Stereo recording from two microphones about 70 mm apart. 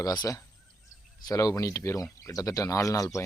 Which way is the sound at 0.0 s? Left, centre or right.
Left.